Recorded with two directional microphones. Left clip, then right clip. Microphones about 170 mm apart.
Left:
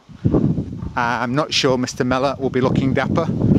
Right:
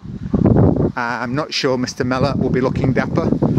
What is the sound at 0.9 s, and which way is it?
Speech, 5° left (ahead or behind).